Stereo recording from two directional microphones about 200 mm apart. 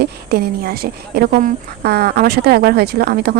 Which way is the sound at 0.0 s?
50° right (ahead or behind).